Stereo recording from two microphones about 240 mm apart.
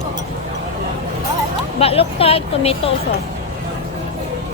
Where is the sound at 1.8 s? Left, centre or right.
Left.